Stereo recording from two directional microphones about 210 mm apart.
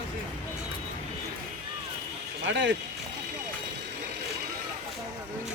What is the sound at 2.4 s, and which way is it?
Speech, 60° right (ahead or behind).